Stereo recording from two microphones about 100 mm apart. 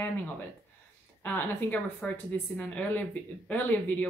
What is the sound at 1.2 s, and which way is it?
A woman's voice, 15° left (ahead or behind).